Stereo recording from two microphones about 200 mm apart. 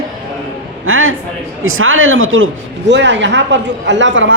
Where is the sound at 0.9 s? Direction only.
90° right.